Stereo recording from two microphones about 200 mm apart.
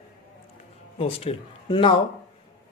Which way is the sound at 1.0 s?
30° left (ahead or behind).